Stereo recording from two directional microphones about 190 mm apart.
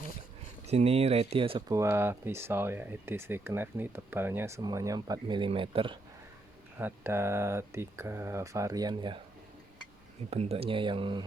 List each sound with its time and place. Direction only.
0.7 s speech: 35° right (ahead or behind)
6.7 s speech: 10° right (ahead or behind)
10.2 s speech: 35° right (ahead or behind)